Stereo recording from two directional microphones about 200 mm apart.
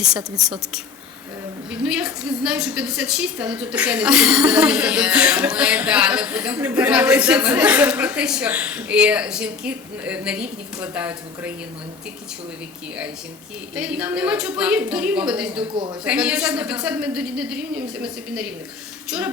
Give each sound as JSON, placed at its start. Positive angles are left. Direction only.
{"t": 0.3, "sound": "a woman's voice", "side_deg": -5}
{"t": 13.7, "sound": "a woman's voice", "side_deg": -5}
{"t": 15.7, "sound": "a man's voice", "side_deg": -25}
{"t": 16.0, "sound": "a woman's voice", "side_deg": -5}